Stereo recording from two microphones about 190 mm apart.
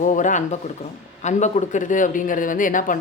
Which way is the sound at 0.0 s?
40° left (ahead or behind).